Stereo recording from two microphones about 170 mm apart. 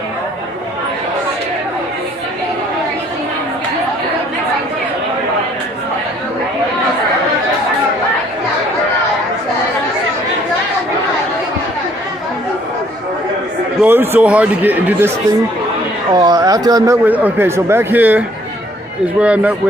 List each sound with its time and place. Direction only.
13.8 s speech: 10° right (ahead or behind)
16.1 s speech: 20° right (ahead or behind)